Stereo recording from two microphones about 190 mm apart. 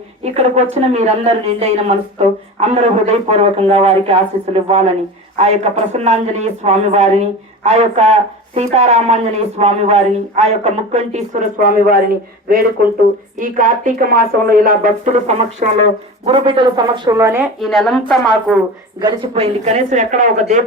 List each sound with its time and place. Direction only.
0.3 s speech: 35° right (ahead or behind); by 17.4 s 15° right (ahead or behind)
17.6 s speech: centre (ahead or behind)
18.9 s speech: 30° right (ahead or behind)